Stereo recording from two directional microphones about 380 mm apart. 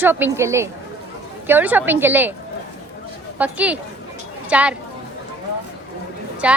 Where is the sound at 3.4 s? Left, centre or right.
Centre.